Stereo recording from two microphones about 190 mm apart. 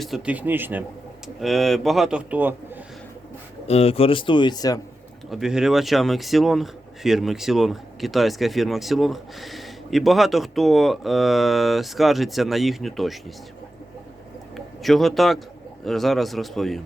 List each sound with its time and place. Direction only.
0.0 s speech: 5° right (ahead or behind)
3.7 s speech: 30° left (ahead or behind)
5.3 s speech: 5° right (ahead or behind)
14.5 s speech: centre (ahead or behind)